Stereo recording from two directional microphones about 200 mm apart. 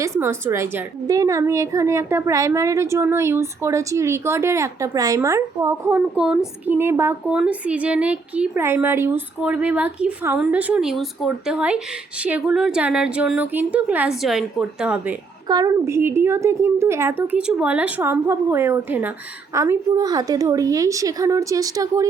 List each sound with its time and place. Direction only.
0.0 s a woman's voice: 15° right (ahead or behind)
15.4 s a woman's voice: 20° right (ahead or behind)